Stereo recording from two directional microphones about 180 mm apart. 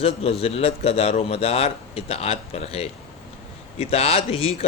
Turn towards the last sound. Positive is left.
turn(degrees=30)  # may be behind; listen again after turning